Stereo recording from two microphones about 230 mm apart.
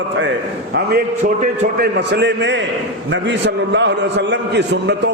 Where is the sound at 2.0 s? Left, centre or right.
Right.